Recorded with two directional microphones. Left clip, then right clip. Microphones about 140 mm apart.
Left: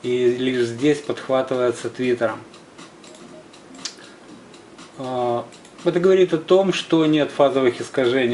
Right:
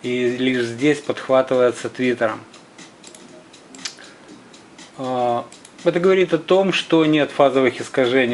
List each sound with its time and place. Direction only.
0.0 s speech: 20° right (ahead or behind)
5.0 s speech: 20° right (ahead or behind)